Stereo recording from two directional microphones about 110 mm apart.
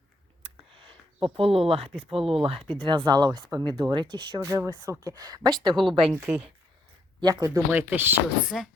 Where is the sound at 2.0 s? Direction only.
60° right (ahead or behind).